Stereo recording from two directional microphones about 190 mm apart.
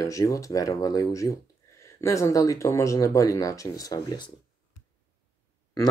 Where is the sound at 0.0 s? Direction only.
15° left (ahead or behind).